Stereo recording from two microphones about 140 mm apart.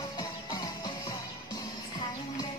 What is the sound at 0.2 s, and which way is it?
Music, 30° left (ahead or behind).